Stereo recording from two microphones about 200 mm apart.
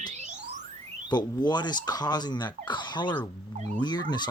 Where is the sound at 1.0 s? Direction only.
20° left (ahead or behind).